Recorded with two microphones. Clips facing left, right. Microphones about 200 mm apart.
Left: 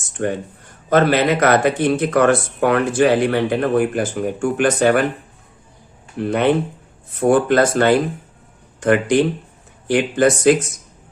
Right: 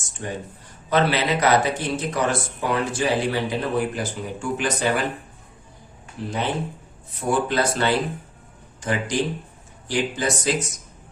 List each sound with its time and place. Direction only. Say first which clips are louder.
0.1 s speech: left 10 dB; 60° left (ahead or behind)
0.9 s speech: left 6 dB; 50° left (ahead or behind)
6.1 s speech: left 10 dB; 60° left (ahead or behind)